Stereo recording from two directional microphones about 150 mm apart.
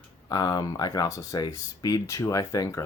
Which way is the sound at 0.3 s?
25° left (ahead or behind).